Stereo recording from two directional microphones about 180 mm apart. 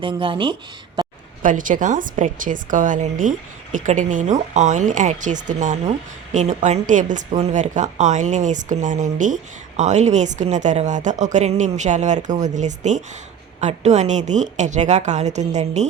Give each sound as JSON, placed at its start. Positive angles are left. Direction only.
{"t": 0.0, "sound": "speech", "side_deg": -30}
{"t": 1.0, "sound": "a sound", "side_deg": -25}
{"t": 1.4, "sound": "a woman's voice", "side_deg": -45}